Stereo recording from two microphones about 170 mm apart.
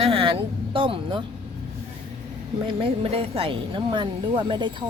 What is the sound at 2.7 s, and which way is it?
Speech, 30° right (ahead or behind).